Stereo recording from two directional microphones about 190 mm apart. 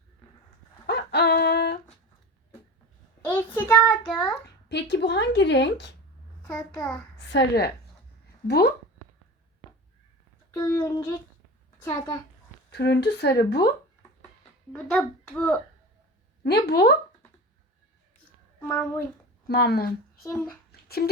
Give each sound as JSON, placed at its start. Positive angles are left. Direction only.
{"t": 0.9, "sound": "a sound", "side_deg": 60}
{"t": 3.2, "sound": "child singing", "side_deg": 10}
{"t": 4.7, "sound": "a woman's voice", "side_deg": 65}
{"t": 7.2, "sound": "a woman's voice", "side_deg": 65}
{"t": 10.5, "sound": "a sound", "side_deg": 20}
{"t": 11.8, "sound": "a woman's voice", "side_deg": 20}
{"t": 12.7, "sound": "a woman's voice", "side_deg": 60}
{"t": 14.7, "sound": "a child's voice", "side_deg": 5}
{"t": 16.4, "sound": "a woman's voice", "side_deg": 60}
{"t": 18.7, "sound": "a child's voice", "side_deg": 5}
{"t": 19.5, "sound": "a woman's voice", "side_deg": 55}
{"t": 20.2, "sound": "a woman's voice", "side_deg": 10}